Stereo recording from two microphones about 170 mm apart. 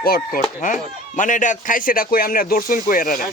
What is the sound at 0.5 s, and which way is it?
Speech, 50° left (ahead or behind).